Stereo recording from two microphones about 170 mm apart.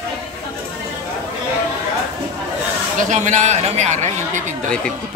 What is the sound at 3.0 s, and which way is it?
Speech, 45° right (ahead or behind).